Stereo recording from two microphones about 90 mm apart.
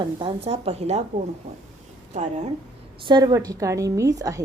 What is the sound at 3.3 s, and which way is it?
A woman's voice, 40° right (ahead or behind).